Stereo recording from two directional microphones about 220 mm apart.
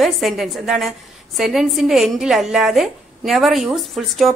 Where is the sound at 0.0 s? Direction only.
Centre (ahead or behind).